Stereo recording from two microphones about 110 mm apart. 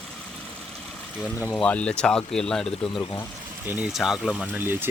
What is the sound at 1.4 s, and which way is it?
Speech, 10° left (ahead or behind).